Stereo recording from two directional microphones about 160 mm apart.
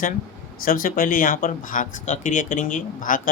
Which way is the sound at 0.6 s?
60° left (ahead or behind).